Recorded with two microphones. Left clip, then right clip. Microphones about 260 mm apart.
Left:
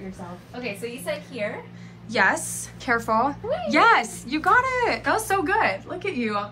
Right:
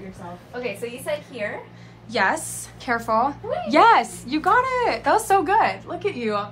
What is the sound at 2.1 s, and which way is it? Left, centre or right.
A woman's voice, centre.